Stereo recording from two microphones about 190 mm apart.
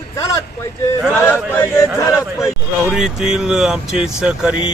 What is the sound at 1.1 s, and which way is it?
Speech, 10° left (ahead or behind).